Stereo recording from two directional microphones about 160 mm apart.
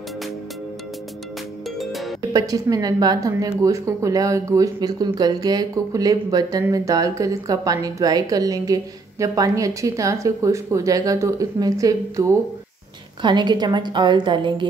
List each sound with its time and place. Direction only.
1.8 s music: centre (ahead or behind)
2.3 s a woman's voice: 20° right (ahead or behind)